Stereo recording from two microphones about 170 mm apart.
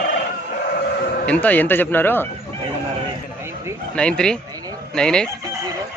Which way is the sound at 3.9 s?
5° left (ahead or behind).